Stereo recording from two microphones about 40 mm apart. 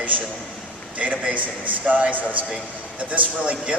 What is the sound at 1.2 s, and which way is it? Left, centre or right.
A man's voice, right.